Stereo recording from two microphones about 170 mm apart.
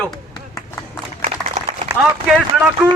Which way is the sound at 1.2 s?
40° right (ahead or behind).